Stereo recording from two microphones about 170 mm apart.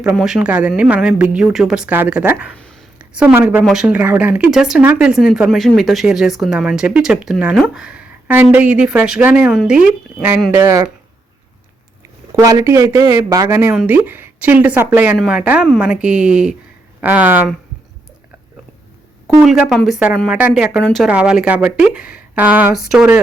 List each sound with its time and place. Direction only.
0.2 s speech: 5° right (ahead or behind)
2.6 s a sound: 5° left (ahead or behind)
3.2 s speech: 10° right (ahead or behind)
12.4 s speech: 20° right (ahead or behind)
19.6 s speech: centre (ahead or behind)